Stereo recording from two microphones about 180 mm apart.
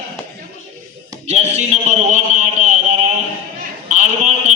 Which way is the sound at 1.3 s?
35° right (ahead or behind).